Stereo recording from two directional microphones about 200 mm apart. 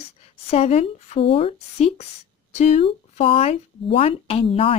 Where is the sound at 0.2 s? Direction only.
30° left (ahead or behind).